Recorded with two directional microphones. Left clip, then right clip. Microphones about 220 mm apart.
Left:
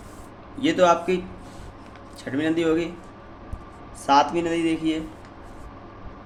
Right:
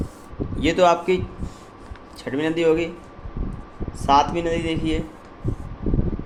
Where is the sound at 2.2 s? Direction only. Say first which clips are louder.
Right 3 dB; 25° right (ahead or behind).